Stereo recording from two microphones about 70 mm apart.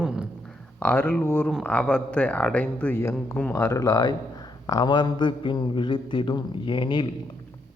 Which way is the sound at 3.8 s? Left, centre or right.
Left.